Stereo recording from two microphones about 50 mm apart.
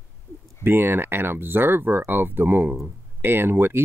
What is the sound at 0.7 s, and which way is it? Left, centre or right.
Speech, right.